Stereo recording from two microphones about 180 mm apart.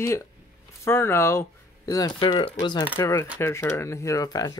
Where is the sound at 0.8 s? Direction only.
15° left (ahead or behind).